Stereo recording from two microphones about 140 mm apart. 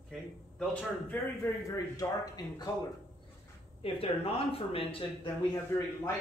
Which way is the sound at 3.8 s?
40° left (ahead or behind).